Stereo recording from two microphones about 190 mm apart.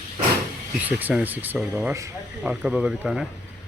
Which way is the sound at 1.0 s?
10° right (ahead or behind).